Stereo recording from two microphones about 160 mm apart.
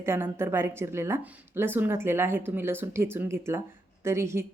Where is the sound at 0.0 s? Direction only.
15° right (ahead or behind).